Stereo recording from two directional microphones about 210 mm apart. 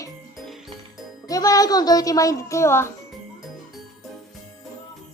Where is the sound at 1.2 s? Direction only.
15° left (ahead or behind).